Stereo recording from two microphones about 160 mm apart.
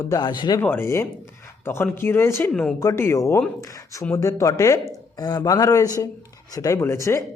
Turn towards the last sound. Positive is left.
turn(degrees=20)  # may be behind; listen again after turning